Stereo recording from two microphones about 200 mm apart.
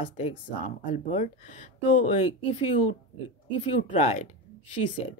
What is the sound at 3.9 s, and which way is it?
Speech, 35° left (ahead or behind).